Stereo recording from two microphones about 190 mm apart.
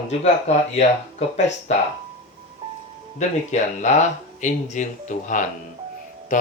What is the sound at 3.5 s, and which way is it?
Speech, 40° left (ahead or behind).